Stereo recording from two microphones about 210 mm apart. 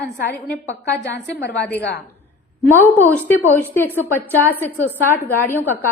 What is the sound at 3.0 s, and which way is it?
Speech, 10° left (ahead or behind).